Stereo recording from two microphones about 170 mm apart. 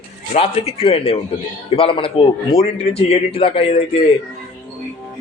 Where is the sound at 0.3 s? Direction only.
35° left (ahead or behind).